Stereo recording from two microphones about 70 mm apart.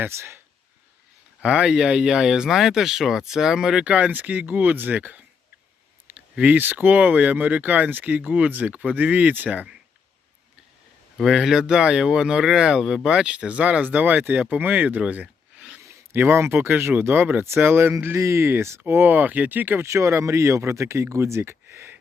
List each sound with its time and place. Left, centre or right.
0.0 s speech: right
1.4 s speech: centre
3.9 s speech: right
6.1 s a sound: centre
6.5 s speech: right
11.2 s speech: centre; by 15.3 s right
16.1 s speech: right
18.2 s speech: right
19.9 s speech: right